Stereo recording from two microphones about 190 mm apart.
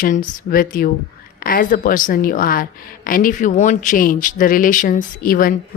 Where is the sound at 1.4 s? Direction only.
50° left (ahead or behind).